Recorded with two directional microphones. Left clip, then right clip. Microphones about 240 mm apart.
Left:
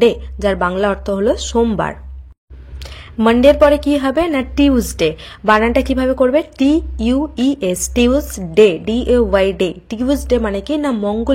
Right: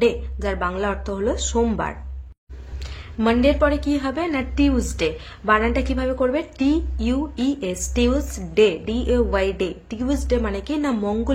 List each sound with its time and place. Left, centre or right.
0.0 s a woman's voice: left
3.2 s a woman's voice: left